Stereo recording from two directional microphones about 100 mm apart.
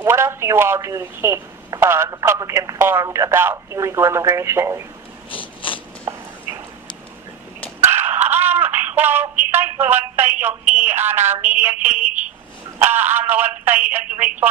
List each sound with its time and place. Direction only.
0.0 s speech: 25° right (ahead or behind)
2.0 s speech: 35° right (ahead or behind)
5.3 s mechanisms: 60° left (ahead or behind)
7.8 s a sound: 20° right (ahead or behind)
10.4 s speech: 20° right (ahead or behind)